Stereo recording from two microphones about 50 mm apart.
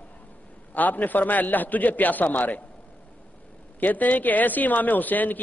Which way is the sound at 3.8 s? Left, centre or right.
Left.